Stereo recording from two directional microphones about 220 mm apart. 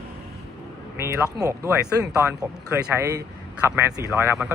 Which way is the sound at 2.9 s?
15° right (ahead or behind).